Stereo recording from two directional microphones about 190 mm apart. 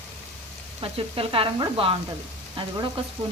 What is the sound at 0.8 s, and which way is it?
Speech, 30° right (ahead or behind).